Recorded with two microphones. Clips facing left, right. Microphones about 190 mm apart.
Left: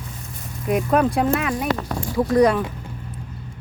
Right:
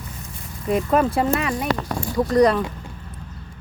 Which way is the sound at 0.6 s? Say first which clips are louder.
Even; centre (ahead or behind).